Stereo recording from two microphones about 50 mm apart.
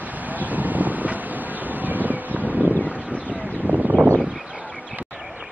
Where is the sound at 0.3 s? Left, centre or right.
Right.